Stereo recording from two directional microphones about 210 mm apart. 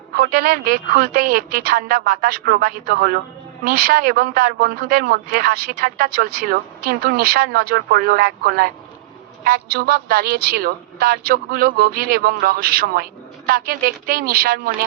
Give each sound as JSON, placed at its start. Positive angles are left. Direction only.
{"t": 0.2, "sound": "speech", "side_deg": -45}